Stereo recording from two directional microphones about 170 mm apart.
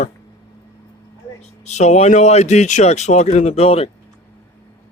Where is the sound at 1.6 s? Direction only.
40° left (ahead or behind).